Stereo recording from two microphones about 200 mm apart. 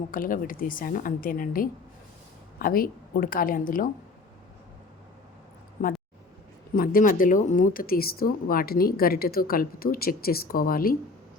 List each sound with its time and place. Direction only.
0.1 s speech: 45° left (ahead or behind)
5.8 s speech: 40° left (ahead or behind)